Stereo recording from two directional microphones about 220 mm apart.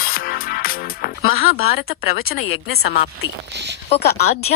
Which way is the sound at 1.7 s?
45° left (ahead or behind).